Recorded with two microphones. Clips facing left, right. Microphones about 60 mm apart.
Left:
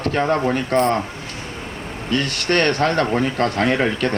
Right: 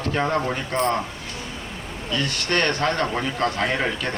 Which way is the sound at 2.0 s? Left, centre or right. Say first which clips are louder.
Left 4 dB; left.